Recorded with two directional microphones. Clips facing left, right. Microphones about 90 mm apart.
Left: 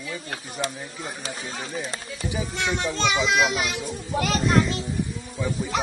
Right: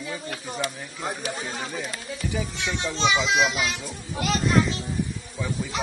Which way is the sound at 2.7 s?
50° left (ahead or behind).